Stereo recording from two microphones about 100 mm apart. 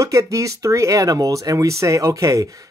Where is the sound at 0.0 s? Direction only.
30° right (ahead or behind).